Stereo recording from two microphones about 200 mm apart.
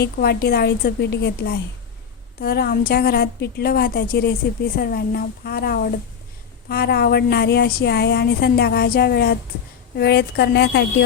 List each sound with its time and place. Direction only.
0.0 s a woman's voice: 50° left (ahead or behind)